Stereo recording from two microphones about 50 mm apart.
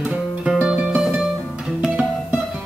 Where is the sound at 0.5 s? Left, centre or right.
Right.